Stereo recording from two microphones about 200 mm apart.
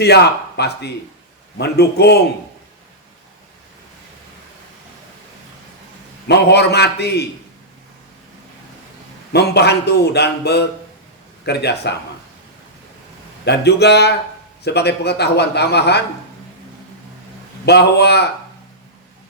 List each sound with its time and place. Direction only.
0.0 s a man's voice: 55° left (ahead or behind)
6.2 s a man's voice: 55° left (ahead or behind)
9.3 s a man's voice: 55° left (ahead or behind)
13.4 s a man's voice: 55° left (ahead or behind)
17.7 s a man's voice: 55° left (ahead or behind)